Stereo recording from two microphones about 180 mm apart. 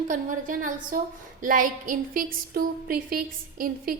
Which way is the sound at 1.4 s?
50° right (ahead or behind).